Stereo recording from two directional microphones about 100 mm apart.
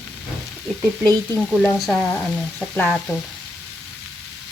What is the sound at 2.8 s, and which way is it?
Frying, 15° left (ahead or behind).